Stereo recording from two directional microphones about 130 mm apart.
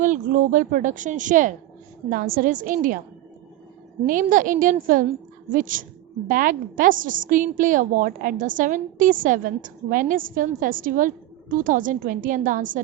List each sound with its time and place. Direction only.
0.0 s a woman's voice: 80° right
4.0 s a woman's voice: 90° right